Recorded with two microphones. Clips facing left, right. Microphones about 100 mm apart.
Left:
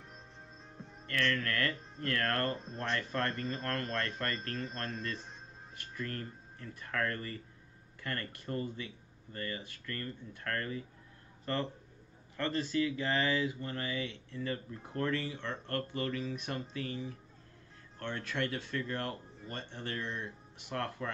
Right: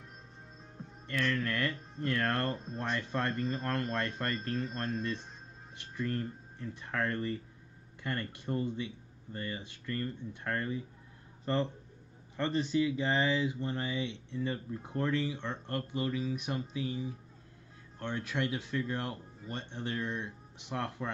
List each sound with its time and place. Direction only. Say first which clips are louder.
1.0 s speech: right 1 dB; 15° right (ahead or behind)